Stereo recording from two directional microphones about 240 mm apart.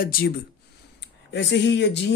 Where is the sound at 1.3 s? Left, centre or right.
Left.